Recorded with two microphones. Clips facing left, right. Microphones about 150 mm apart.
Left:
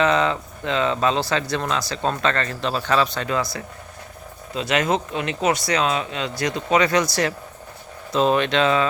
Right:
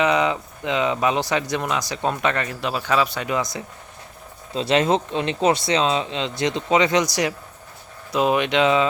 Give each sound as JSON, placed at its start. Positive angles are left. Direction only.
{"t": 0.0, "sound": "speech", "side_deg": -15}
{"t": 4.5, "sound": "speech", "side_deg": -30}